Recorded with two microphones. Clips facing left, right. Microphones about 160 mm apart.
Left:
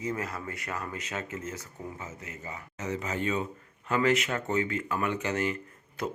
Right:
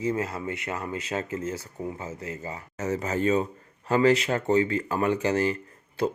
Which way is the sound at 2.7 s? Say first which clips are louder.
Right 5 dB; 45° right (ahead or behind).